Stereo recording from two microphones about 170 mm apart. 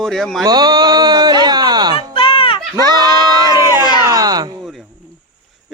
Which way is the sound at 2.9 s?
25° right (ahead or behind).